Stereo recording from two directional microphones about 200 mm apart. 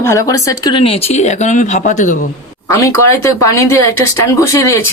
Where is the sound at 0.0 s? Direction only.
15° left (ahead or behind); by 2.2 s 40° left (ahead or behind).